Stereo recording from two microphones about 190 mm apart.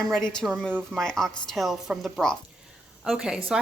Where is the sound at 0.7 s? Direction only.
10° right (ahead or behind).